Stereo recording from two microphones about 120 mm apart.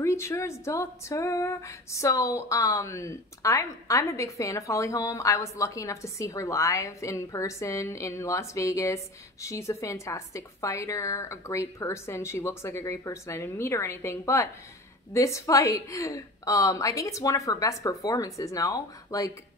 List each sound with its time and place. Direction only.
0.0 s speech: 25° left (ahead or behind)